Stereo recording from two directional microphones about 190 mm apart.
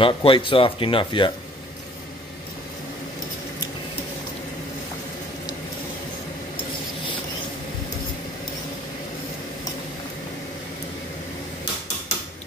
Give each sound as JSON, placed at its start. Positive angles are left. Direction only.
{"t": 0.0, "sound": "speech", "side_deg": 25}